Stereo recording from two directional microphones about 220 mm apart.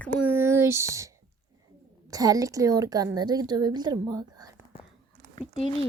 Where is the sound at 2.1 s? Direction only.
15° right (ahead or behind).